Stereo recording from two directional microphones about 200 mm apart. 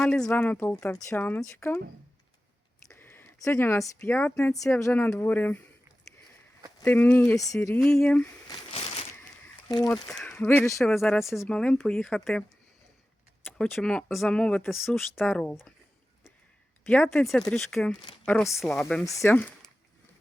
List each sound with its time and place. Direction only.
0.0 s speech: 5° left (ahead or behind)
2.9 s speech: 10° left (ahead or behind)
6.7 s speech: 10° left (ahead or behind)
7.8 s speech: centre (ahead or behind)
8.4 s a sound: 25° left (ahead or behind)
9.6 s speech: 20° left (ahead or behind)
10.1 s speech: 5° left (ahead or behind)
16.8 s speech: 5° left (ahead or behind)
18.3 s speech: 10° left (ahead or behind)
18.6 s speech: centre (ahead or behind)
19.0 s speech: 15° left (ahead or behind)